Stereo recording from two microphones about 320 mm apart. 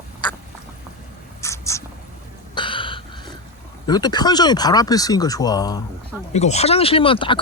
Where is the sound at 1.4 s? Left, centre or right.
Centre.